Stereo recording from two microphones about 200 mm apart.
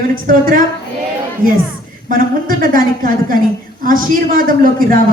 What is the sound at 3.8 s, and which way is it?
Speech, 45° right (ahead or behind).